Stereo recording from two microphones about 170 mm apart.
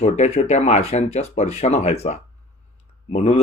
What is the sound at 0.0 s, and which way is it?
A man's voice, 40° left (ahead or behind).